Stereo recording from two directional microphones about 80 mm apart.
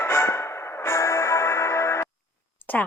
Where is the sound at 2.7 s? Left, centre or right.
Centre.